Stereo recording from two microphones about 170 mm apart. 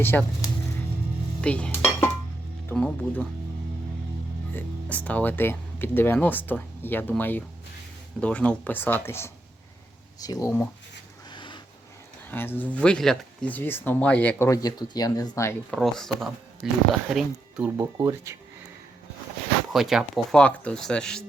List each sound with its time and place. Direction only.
0.0 s speech: 10° left (ahead or behind)
1.4 s dishes: 5° left (ahead or behind)
2.6 s speech: 5° left (ahead or behind)
4.5 s speech: 10° left (ahead or behind)
11.3 s a sound: 25° left (ahead or behind)
12.3 s speech: 10° left (ahead or behind)
15.7 s speech: centre (ahead or behind)
17.9 s speech: 15° right (ahead or behind)
19.7 s speech: centre (ahead or behind)